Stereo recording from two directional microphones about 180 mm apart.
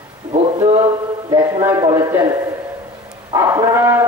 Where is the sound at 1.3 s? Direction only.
15° right (ahead or behind).